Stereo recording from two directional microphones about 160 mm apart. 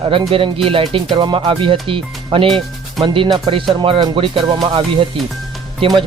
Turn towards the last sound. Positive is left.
turn(degrees=-35)  # may be behind; listen again after turning